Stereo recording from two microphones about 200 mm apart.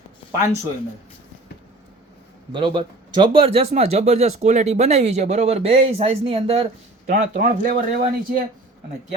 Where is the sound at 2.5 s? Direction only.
25° right (ahead or behind).